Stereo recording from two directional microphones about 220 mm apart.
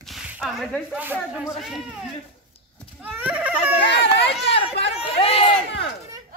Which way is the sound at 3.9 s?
50° left (ahead or behind).